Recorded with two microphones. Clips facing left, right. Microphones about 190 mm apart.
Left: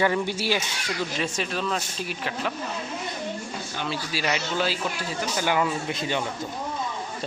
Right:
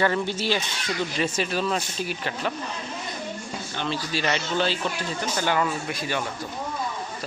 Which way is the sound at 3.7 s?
5° left (ahead or behind).